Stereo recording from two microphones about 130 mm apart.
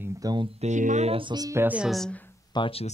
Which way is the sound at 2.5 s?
40° left (ahead or behind).